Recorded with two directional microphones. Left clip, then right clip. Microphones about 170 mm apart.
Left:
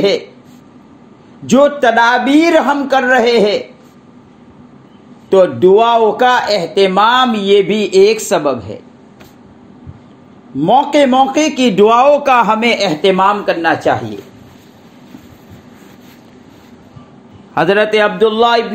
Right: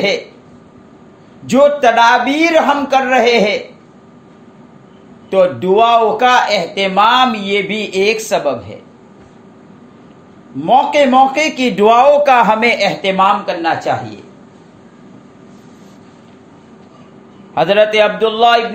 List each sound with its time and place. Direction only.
1.4 s a man's voice: 40° left (ahead or behind)
5.3 s speech: 40° left (ahead or behind)
10.6 s speech: 45° left (ahead or behind)
17.6 s speech: 25° left (ahead or behind)